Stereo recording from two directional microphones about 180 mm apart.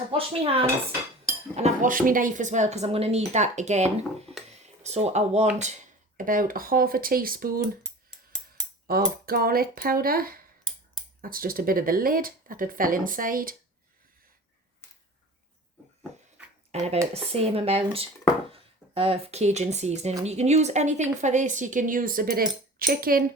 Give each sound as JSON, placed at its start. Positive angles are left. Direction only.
{"t": 0.1, "sound": "speech", "side_deg": -30}
{"t": 6.1, "sound": "a woman's voice", "side_deg": -50}
{"t": 8.9, "sound": "a woman's voice", "side_deg": -55}
{"t": 16.7, "sound": "a woman's voice", "side_deg": -35}